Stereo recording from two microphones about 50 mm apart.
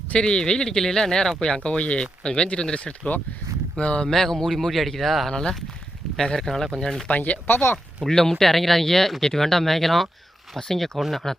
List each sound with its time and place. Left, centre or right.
0.1 s speech: centre
4.1 s speech: centre
5.3 s speech: centre
7.1 s speech: left
8.0 s speech: centre